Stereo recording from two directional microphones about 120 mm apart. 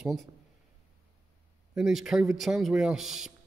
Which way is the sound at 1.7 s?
Centre (ahead or behind).